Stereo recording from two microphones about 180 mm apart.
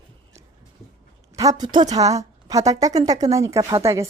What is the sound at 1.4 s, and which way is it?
A woman's voice, 20° right (ahead or behind).